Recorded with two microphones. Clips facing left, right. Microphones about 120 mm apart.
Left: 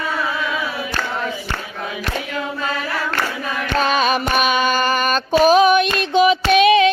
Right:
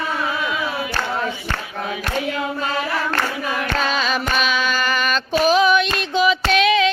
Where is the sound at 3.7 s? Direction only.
50° left (ahead or behind).